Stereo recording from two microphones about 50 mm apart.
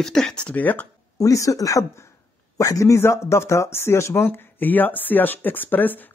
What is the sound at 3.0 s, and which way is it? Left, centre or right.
Speech, left.